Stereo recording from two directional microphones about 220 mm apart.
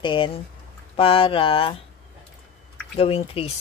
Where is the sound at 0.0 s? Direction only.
20° left (ahead or behind).